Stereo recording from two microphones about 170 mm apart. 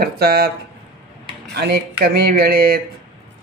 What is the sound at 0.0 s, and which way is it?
Speech, 65° right (ahead or behind).